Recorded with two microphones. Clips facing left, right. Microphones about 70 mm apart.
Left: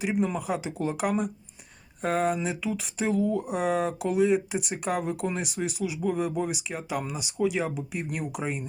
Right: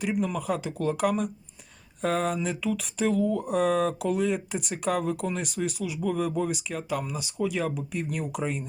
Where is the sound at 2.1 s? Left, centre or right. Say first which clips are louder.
Left 2 dB; centre.